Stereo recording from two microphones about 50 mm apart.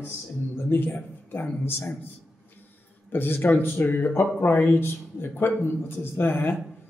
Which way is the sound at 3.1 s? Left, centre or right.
Left.